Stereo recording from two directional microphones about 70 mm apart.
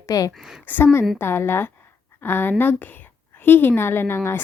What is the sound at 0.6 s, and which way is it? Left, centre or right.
A woman's voice, left.